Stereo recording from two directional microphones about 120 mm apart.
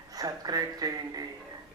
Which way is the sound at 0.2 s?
30° right (ahead or behind).